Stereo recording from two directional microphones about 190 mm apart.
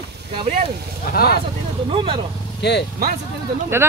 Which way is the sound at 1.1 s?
55° left (ahead or behind).